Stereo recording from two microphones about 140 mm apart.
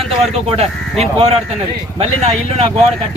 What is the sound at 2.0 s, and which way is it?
Speech, 50° right (ahead or behind).